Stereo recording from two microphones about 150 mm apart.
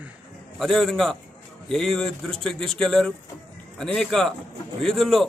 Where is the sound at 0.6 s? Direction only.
Centre (ahead or behind).